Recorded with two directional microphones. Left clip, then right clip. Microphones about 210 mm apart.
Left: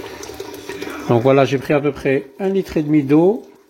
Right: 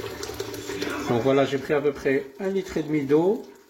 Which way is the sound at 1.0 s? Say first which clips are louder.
Left 8 dB; 45° left (ahead or behind).